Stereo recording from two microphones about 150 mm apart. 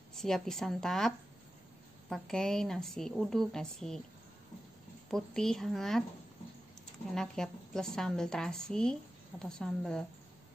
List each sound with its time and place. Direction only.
0.1 s a woman's voice: 5° left (ahead or behind)
5.1 s a woman's voice: 5° left (ahead or behind)
7.2 s a woman's voice: 5° left (ahead or behind)